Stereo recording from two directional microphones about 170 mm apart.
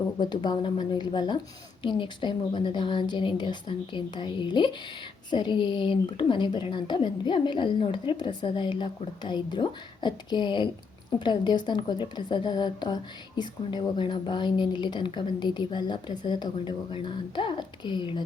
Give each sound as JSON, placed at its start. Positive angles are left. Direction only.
{"t": 0.2, "sound": "a woman's voice", "side_deg": 25}